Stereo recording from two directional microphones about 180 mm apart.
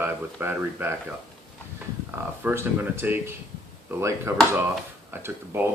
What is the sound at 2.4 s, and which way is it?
Speech, 10° right (ahead or behind).